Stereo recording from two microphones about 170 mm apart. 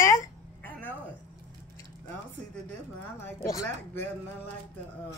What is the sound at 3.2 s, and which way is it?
Speech, 15° left (ahead or behind).